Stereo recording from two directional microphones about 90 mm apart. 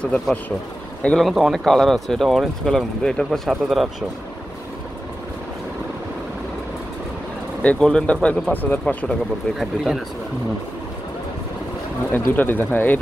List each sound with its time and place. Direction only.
0.0 s speech: 10° left (ahead or behind)
1.2 s speech: 5° right (ahead or behind)
7.6 s speech: 10° left (ahead or behind)
9.6 s speech: centre (ahead or behind)
12.1 s speech: 20° left (ahead or behind)